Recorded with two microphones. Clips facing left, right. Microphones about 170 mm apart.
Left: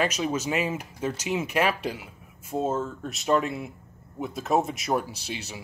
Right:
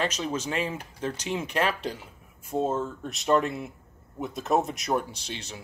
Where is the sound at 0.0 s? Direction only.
10° left (ahead or behind).